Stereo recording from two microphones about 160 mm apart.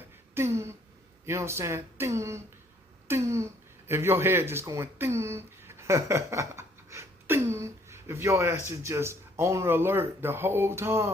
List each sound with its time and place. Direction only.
0.3 s speech: 15° right (ahead or behind)